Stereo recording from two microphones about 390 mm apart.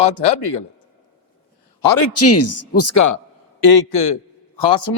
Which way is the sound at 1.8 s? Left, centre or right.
Left.